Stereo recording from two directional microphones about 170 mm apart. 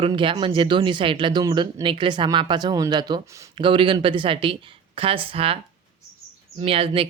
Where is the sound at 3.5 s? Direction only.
30° right (ahead or behind).